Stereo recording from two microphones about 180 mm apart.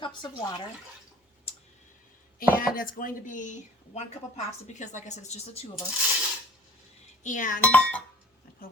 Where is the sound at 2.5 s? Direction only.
50° left (ahead or behind); by 5.7 s 35° left (ahead or behind).